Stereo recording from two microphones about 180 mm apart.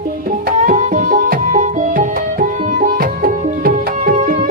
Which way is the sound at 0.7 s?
50° right (ahead or behind).